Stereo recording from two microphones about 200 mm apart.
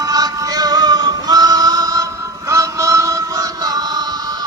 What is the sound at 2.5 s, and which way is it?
Synthetic singing, 15° right (ahead or behind).